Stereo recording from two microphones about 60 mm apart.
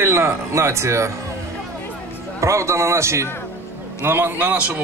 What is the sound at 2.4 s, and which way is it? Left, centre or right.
Speech, right.